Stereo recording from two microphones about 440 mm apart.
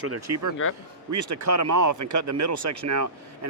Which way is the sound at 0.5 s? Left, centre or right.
Left.